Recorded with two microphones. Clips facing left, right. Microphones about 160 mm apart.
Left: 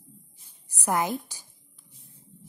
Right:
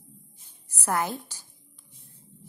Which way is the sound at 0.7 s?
15° left (ahead or behind).